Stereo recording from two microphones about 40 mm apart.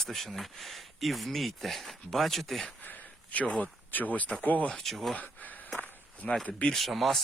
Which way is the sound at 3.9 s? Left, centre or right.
Left.